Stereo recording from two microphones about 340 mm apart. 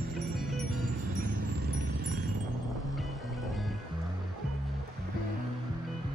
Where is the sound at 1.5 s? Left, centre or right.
Right.